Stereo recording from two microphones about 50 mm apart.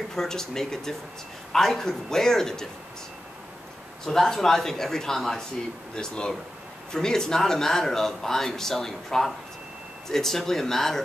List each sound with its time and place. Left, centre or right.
0.1 s speech: centre
4.0 s speech: centre